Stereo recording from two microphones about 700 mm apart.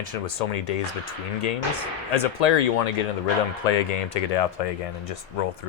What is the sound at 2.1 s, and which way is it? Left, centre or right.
Speech, left.